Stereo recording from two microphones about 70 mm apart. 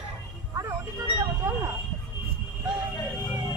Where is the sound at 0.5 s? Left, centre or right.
Right.